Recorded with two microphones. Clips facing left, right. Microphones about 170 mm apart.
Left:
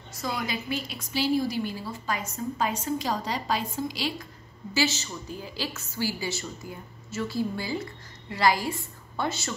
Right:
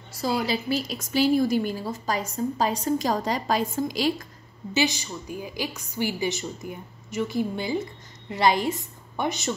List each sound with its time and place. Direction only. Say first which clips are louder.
0.1 s a woman's voice: right 6 dB; 30° right (ahead or behind)
4.7 s a woman's voice: right 2 dB; 15° right (ahead or behind)